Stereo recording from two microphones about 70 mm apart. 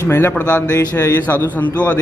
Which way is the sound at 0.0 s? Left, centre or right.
Left.